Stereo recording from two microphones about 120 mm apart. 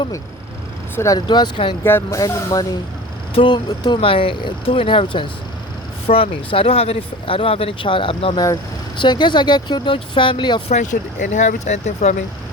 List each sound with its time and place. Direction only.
0.9 s speech: 25° left (ahead or behind)
1.3 s speech: 40° left (ahead or behind)
1.8 s speech: 20° left (ahead or behind)
3.3 s speech: 40° left (ahead or behind)
9.0 s speech: 40° left (ahead or behind)
10.7 s speech: 80° left